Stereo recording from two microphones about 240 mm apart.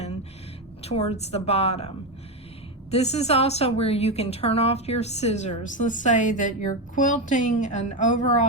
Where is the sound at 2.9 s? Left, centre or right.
Left.